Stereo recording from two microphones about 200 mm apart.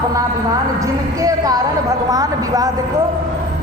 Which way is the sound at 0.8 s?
15° right (ahead or behind).